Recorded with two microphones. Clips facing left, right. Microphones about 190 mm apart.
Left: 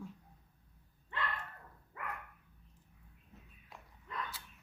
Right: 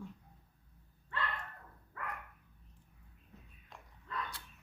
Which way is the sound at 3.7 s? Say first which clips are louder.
Even; 5° left (ahead or behind).